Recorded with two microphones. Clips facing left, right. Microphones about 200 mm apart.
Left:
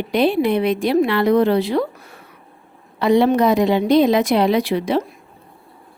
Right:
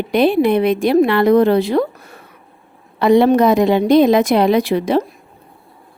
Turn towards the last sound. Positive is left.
turn(degrees=-45)  # may be behind; listen again after turning